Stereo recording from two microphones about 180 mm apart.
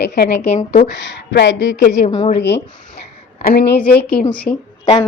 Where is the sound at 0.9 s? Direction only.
75° left (ahead or behind).